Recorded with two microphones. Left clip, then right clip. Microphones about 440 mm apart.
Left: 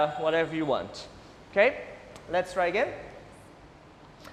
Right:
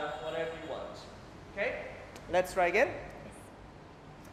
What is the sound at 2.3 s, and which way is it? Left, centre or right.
Speech, left.